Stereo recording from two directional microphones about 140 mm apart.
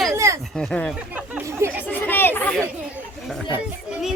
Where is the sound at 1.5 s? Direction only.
20° right (ahead or behind).